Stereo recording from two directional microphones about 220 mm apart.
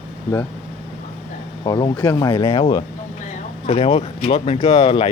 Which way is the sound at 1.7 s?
20° left (ahead or behind).